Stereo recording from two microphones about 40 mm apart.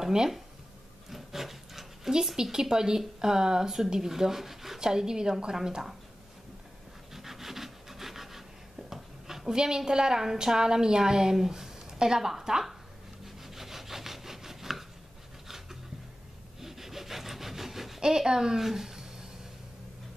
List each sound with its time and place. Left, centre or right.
0.0 s speech: centre
1.1 s dog: centre
2.3 s speech: centre
4.8 s speech: centre
7.1 s rub: centre
8.7 s a woman's voice: centre
13.2 s wood: centre
15.4 s dog: centre
16.5 s a sound: centre
18.0 s speech: centre